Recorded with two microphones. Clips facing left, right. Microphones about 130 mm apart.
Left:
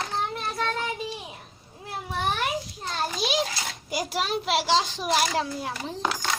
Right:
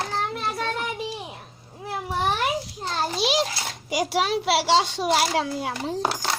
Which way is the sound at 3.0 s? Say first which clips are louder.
Right 3 dB; 30° right (ahead or behind).